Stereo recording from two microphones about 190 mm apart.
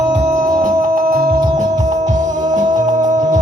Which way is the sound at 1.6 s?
40° right (ahead or behind).